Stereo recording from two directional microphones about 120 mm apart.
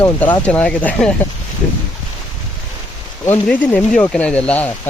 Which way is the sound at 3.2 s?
15° left (ahead or behind).